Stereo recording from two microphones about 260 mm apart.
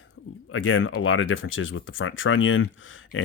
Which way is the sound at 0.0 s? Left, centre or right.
Left.